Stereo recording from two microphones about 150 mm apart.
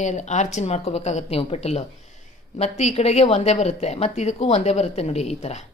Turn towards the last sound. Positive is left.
turn(degrees=45)  # may be behind; listen again after turning